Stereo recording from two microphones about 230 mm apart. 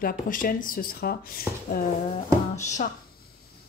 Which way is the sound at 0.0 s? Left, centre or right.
Left.